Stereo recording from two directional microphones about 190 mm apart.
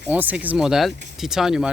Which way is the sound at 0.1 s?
10° right (ahead or behind).